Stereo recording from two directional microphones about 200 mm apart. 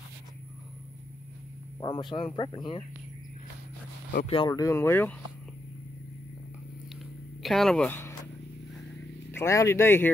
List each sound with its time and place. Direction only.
1.8 s speech: 20° left (ahead or behind)
4.3 s speech: 20° left (ahead or behind)
7.4 s speech: centre (ahead or behind)
9.3 s speech: 15° left (ahead or behind)